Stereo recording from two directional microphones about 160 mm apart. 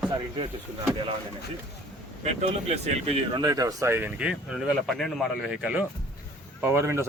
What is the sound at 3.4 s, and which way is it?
Speech, 25° right (ahead or behind).